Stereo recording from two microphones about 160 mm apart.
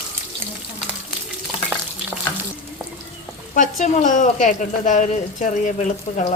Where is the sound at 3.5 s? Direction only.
50° left (ahead or behind).